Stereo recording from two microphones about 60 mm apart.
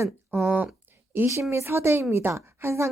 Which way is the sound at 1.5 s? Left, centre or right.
Right.